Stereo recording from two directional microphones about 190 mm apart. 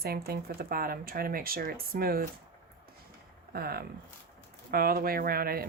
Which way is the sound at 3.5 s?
55° right (ahead or behind).